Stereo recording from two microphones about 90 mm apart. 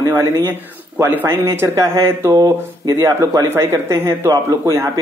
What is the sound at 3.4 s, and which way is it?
Speech, 25° right (ahead or behind).